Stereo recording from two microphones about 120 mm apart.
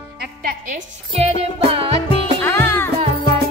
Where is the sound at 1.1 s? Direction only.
55° right (ahead or behind).